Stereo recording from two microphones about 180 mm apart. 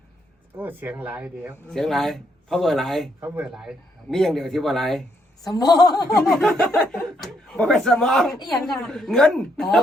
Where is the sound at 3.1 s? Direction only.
10° right (ahead or behind).